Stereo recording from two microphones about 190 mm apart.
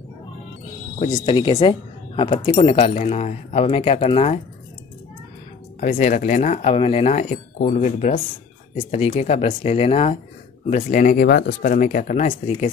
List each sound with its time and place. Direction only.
1.2 s speech: 25° left (ahead or behind)
5.8 s speech: 40° left (ahead or behind)